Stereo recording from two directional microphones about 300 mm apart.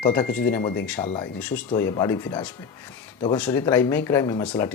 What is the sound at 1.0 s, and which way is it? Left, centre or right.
Speech, centre.